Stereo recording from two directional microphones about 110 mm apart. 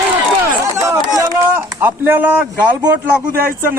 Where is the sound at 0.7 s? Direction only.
30° right (ahead or behind).